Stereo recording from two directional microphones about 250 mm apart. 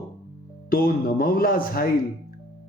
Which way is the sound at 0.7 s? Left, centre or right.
Left.